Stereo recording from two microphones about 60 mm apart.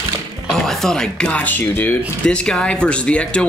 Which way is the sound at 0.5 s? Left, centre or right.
Centre.